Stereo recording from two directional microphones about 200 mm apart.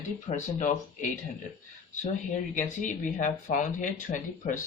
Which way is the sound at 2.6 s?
40° left (ahead or behind).